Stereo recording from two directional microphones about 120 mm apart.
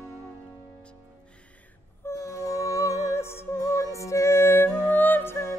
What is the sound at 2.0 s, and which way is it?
Music, 25° left (ahead or behind).